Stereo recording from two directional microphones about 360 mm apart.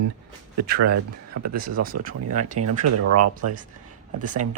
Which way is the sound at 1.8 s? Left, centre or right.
Right.